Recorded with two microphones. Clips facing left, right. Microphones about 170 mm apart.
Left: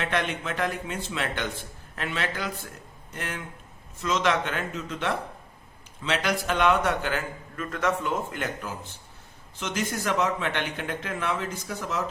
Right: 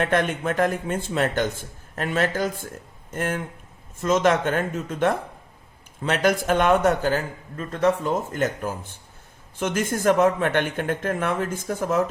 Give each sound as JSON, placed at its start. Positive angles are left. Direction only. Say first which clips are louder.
{"t": 0.0, "sound": "a man's voice", "louder": "right 6 dB", "side_deg": -50}